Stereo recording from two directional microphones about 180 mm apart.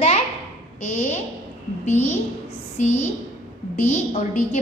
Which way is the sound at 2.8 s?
40° left (ahead or behind).